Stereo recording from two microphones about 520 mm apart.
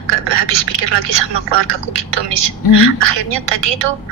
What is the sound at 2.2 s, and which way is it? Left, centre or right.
Speech, right.